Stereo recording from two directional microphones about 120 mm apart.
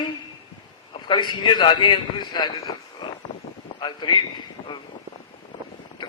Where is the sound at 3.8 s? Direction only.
40° left (ahead or behind).